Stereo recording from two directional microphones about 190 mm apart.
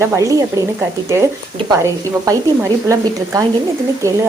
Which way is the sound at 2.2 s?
15° right (ahead or behind).